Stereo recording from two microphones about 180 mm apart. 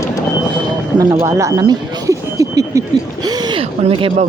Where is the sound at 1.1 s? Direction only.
15° right (ahead or behind).